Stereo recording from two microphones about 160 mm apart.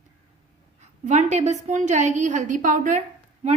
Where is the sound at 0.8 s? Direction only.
45° right (ahead or behind).